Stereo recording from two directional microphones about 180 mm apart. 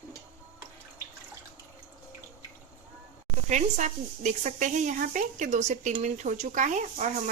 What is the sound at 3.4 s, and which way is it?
A woman's voice, 40° right (ahead or behind).